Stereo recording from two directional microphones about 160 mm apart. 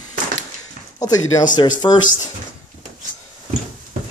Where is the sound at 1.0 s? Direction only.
25° left (ahead or behind).